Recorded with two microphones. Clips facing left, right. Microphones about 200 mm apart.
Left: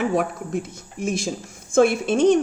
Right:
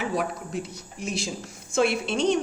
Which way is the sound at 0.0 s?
50° left (ahead or behind).